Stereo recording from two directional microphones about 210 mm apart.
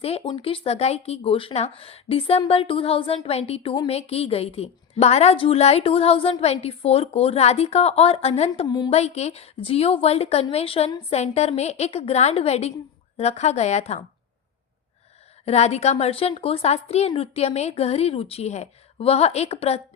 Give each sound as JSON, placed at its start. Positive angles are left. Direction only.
{"t": 0.0, "sound": "speech", "side_deg": 25}
{"t": 8.6, "sound": "speech", "side_deg": 20}
{"t": 9.0, "sound": "a woman's voice", "side_deg": 30}
{"t": 15.4, "sound": "speech", "side_deg": 30}